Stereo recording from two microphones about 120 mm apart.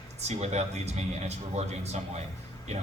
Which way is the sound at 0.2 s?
65° right (ahead or behind).